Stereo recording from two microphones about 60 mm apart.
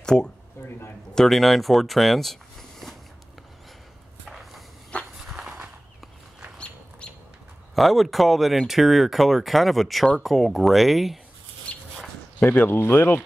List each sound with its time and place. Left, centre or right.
0.0 s speech: centre
0.6 s a man's voice: left
1.1 s speech: centre
4.3 s a sound: centre
4.9 s walk: left
5.3 s a sound: centre
7.7 s speech: centre
11.7 s a sound: left
12.4 s speech: left